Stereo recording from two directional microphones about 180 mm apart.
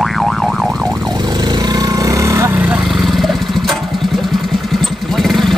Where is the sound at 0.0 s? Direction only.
Centre (ahead or behind).